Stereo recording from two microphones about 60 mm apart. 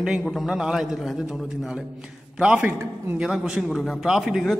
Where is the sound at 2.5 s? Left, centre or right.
Right.